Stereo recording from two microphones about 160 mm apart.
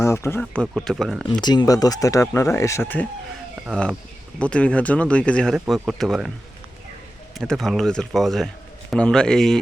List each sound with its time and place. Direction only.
0.0 s speech: 15° left (ahead or behind); by 1.3 s centre (ahead or behind)
1.3 s speech: 25° left (ahead or behind); by 6.3 s centre (ahead or behind)
7.3 s speech: centre (ahead or behind)